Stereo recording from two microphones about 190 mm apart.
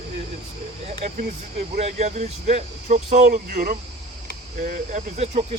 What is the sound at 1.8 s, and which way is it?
Speech, 35° right (ahead or behind).